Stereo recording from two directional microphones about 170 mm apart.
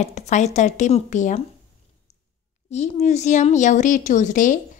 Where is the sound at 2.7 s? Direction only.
40° left (ahead or behind).